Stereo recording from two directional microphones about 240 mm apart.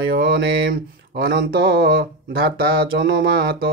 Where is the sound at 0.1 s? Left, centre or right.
Right.